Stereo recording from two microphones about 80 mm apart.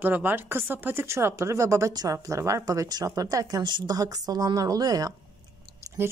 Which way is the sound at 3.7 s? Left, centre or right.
Right.